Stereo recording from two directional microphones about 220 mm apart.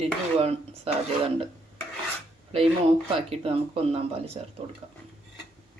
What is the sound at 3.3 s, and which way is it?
Speech, 25° right (ahead or behind).